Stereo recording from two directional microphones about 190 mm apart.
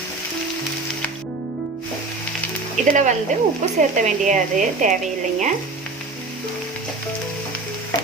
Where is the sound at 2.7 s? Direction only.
40° right (ahead or behind).